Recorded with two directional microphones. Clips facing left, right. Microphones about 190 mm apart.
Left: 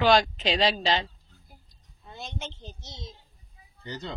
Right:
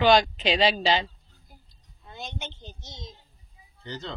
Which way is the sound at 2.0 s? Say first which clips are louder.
Even; centre (ahead or behind).